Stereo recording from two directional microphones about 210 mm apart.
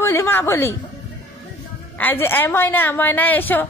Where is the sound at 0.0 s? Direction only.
10° left (ahead or behind).